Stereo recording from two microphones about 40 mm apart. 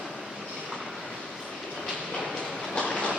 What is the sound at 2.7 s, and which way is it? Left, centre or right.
Train, left.